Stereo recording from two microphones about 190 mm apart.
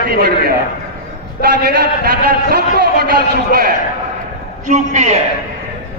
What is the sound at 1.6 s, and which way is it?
A man's voice, 55° right (ahead or behind).